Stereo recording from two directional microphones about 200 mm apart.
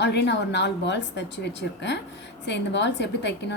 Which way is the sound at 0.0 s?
60° left (ahead or behind).